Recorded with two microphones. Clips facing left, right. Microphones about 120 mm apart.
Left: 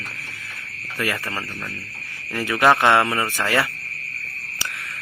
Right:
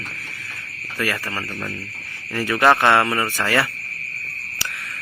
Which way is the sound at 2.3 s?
15° left (ahead or behind).